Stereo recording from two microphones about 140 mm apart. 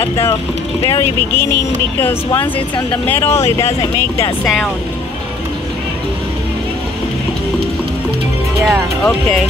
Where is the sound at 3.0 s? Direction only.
15° left (ahead or behind).